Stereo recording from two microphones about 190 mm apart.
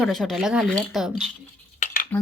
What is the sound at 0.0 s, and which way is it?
Speech, centre (ahead or behind).